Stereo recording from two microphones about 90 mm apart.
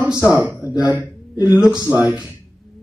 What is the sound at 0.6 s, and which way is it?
Speech, 50° left (ahead or behind).